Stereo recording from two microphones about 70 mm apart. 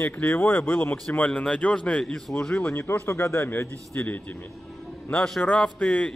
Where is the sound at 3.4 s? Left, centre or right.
Left.